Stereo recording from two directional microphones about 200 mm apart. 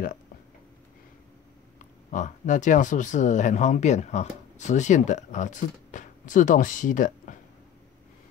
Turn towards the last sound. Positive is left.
turn(degrees=40)  # may be behind; listen again after turning